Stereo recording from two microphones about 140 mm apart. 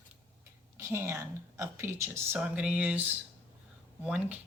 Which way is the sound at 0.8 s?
20° right (ahead or behind).